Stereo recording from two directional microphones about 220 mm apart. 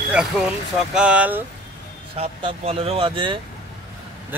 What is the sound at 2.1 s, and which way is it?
Speech, 25° right (ahead or behind).